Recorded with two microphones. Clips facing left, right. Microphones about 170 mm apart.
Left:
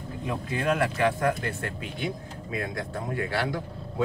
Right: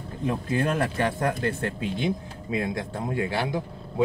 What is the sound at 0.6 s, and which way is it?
Speech, 30° right (ahead or behind).